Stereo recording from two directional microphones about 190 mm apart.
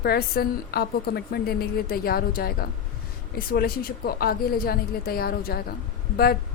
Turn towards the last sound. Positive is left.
turn(degrees=55)  # may be behind; listen again after turning